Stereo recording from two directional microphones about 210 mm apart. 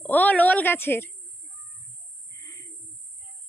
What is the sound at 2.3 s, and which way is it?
Bird, 15° left (ahead or behind).